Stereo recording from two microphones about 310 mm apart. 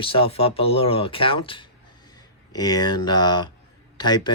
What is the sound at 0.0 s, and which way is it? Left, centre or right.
Speech, centre.